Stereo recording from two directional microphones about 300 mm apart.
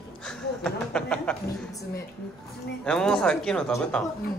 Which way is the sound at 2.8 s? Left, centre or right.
Centre.